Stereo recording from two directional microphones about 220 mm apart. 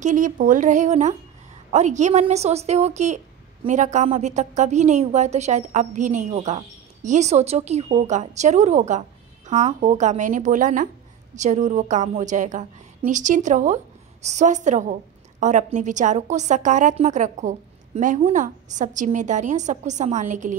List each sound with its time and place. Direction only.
0.0 s a woman's voice: 35° right (ahead or behind)